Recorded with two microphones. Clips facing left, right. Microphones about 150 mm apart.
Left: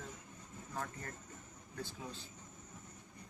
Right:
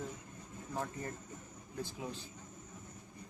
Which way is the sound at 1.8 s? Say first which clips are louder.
Right 4 dB; 15° right (ahead or behind).